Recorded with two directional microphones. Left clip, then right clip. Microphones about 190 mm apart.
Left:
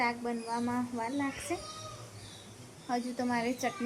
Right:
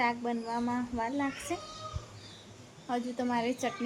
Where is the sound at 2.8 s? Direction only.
10° right (ahead or behind).